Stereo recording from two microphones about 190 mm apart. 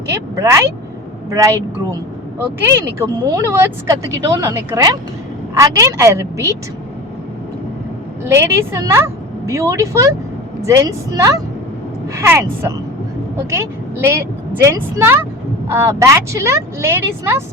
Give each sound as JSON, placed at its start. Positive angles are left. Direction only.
{"t": 0.1, "sound": "speech", "side_deg": -15}
{"t": 3.0, "sound": "speech", "side_deg": -15}
{"t": 8.2, "sound": "a woman's voice", "side_deg": -15}